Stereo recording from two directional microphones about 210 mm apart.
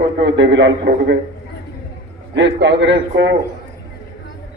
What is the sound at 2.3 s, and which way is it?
A man's voice, 60° right (ahead or behind).